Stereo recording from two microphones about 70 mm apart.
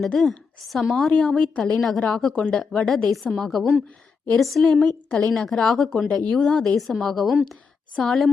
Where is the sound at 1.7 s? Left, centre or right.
Centre.